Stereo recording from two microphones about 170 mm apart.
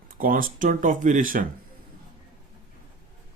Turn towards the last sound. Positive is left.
turn(degrees=-55)  # may be behind; listen again after turning